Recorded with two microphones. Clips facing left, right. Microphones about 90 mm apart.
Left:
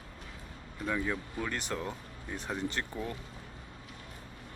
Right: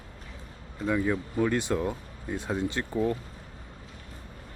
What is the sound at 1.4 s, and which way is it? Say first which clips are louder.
Speech: right 11 dB; 20° right (ahead or behind).